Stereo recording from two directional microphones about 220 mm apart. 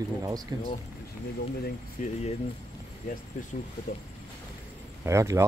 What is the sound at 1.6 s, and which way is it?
Speech, 35° left (ahead or behind).